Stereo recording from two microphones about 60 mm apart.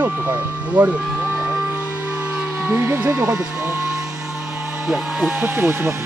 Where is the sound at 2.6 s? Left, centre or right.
Right.